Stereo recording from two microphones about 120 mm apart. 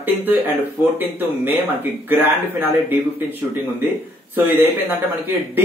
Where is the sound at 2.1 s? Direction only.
15° right (ahead or behind).